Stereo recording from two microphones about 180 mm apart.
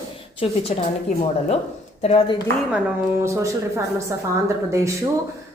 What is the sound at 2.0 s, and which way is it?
Speech, 35° left (ahead or behind).